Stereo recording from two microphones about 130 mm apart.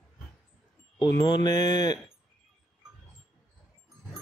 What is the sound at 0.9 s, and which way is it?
Speech, 35° left (ahead or behind).